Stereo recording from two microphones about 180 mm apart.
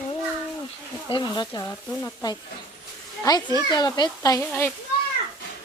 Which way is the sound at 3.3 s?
20° left (ahead or behind).